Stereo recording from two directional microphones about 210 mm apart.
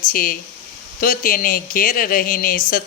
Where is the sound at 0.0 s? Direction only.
40° left (ahead or behind).